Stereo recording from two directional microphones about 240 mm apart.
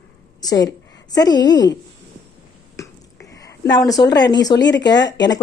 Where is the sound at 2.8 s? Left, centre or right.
Centre.